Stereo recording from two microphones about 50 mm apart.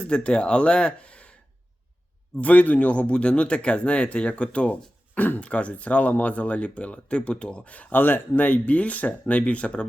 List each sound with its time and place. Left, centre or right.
0.0 s speech: left
2.4 s speech: left